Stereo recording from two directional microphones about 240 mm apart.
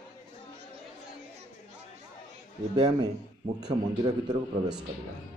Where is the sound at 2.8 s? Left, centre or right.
Centre.